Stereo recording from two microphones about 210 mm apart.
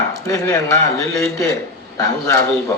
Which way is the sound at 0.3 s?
15° left (ahead or behind).